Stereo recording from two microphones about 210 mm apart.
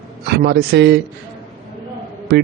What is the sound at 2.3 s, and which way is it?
Speech, 50° right (ahead or behind).